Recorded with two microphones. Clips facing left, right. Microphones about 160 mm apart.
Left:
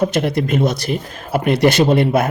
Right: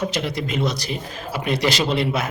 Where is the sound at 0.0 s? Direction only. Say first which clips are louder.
Left 7 dB; 55° left (ahead or behind).